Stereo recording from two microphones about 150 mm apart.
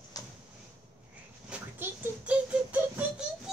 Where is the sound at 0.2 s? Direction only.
25° left (ahead or behind).